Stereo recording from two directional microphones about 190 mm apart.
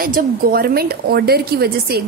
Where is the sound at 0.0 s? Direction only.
50° right (ahead or behind).